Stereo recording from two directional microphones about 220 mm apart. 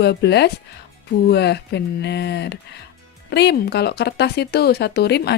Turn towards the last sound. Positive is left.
turn(degrees=50)  # may be behind; listen again after turning